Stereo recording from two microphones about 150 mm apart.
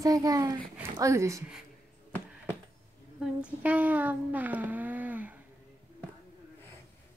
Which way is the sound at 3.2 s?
10° right (ahead or behind).